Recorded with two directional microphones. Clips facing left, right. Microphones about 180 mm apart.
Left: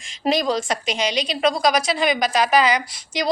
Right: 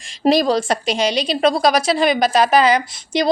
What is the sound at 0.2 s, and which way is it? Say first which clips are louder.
A woman's voice: right 5 dB; 35° right (ahead or behind).